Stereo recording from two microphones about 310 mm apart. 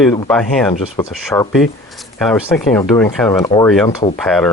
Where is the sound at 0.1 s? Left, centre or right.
Centre.